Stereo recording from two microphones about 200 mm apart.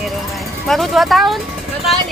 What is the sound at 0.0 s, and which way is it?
Vehicle, centre (ahead or behind).